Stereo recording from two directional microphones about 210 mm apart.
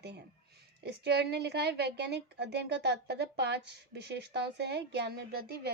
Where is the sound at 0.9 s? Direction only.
50° right (ahead or behind).